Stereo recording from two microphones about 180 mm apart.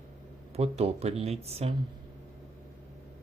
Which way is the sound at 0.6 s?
35° right (ahead or behind).